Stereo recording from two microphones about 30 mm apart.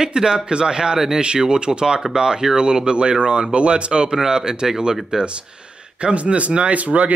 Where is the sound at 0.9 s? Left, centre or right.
Centre.